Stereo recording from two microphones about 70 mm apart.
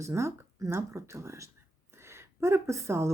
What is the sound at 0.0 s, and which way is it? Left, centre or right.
Speech, right.